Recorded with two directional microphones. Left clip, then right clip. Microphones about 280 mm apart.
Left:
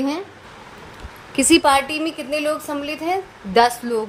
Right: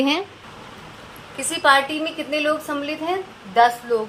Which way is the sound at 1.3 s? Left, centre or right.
Left.